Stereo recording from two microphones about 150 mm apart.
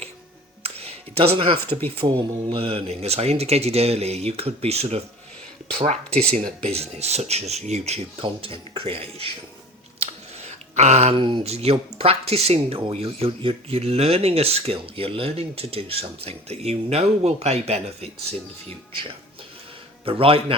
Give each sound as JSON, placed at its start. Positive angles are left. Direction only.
{"t": 0.6, "sound": "a sound", "side_deg": -40}
{"t": 2.0, "sound": "speech", "side_deg": -35}
{"t": 20.1, "sound": "a man's voice", "side_deg": -40}